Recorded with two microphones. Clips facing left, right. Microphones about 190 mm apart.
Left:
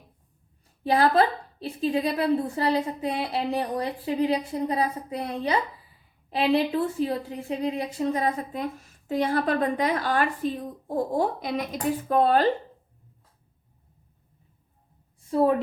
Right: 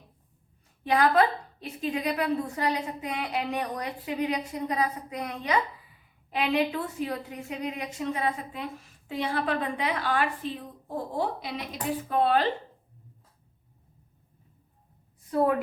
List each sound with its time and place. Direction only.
0.9 s a woman's voice: 35° left (ahead or behind)
15.2 s a woman's voice: 30° left (ahead or behind)